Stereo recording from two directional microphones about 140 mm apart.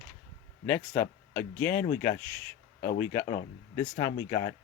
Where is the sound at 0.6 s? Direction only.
15° left (ahead or behind).